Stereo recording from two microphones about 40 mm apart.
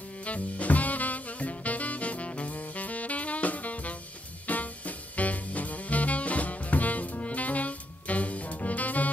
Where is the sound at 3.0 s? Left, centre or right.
Left.